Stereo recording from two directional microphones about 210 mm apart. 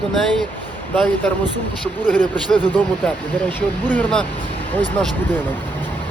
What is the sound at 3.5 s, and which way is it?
Speech, 10° left (ahead or behind).